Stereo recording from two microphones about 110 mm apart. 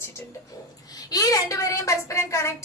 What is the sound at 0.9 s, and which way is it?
A woman's voice, 35° left (ahead or behind).